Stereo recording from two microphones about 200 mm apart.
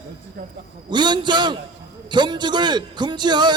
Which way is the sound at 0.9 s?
20° right (ahead or behind).